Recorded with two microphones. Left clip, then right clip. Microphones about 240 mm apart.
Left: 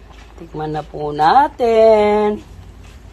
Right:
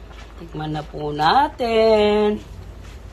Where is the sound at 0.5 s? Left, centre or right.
Left.